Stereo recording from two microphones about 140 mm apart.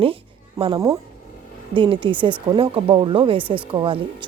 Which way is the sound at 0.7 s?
25° right (ahead or behind).